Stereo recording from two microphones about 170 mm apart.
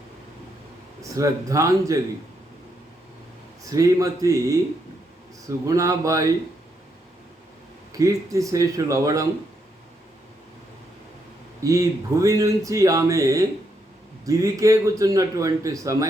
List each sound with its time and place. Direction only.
1.1 s speech: 20° right (ahead or behind)
3.7 s speech: 20° right (ahead or behind)
7.9 s speech: 20° right (ahead or behind)
11.6 s speech: 20° right (ahead or behind)